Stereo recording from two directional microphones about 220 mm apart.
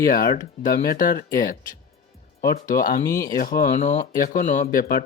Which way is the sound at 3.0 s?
15° left (ahead or behind).